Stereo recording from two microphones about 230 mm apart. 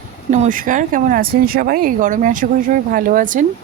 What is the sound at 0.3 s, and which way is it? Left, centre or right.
Speech, right.